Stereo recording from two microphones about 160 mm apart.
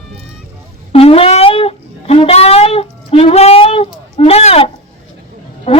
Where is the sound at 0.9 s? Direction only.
35° left (ahead or behind).